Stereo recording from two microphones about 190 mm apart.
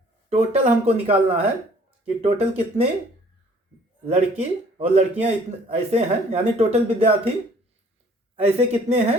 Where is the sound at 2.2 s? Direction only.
35° right (ahead or behind).